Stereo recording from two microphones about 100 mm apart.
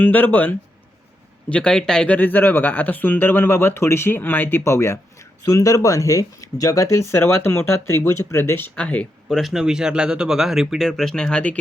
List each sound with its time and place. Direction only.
0.0 s speech: 20° left (ahead or behind)
8.7 s speech: 15° left (ahead or behind)
9.3 s speech: centre (ahead or behind)